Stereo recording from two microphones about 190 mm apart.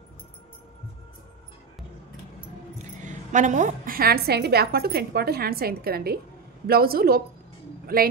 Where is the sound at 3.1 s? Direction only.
40° right (ahead or behind).